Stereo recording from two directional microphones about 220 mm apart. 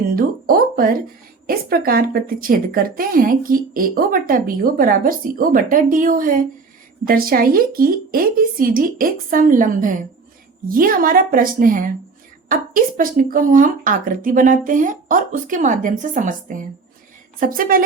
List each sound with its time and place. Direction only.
0.2 s speech: 40° right (ahead or behind)